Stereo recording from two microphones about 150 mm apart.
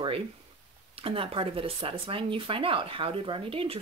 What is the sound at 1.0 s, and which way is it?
Speech, 35° right (ahead or behind).